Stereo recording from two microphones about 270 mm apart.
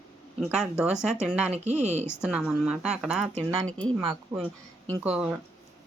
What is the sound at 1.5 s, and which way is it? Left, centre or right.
Speech, right.